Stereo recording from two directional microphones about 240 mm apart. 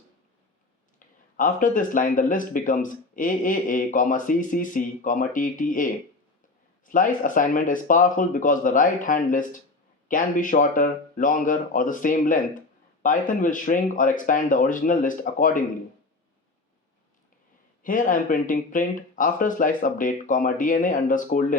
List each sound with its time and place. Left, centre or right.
0.9 s speech: left
17.8 s speech: left